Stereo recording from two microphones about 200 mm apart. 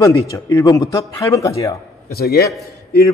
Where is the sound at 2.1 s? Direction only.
50° left (ahead or behind).